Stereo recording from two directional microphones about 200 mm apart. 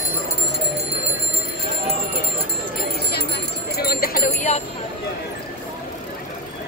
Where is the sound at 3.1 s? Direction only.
55° left (ahead or behind); by 4.6 s 35° left (ahead or behind).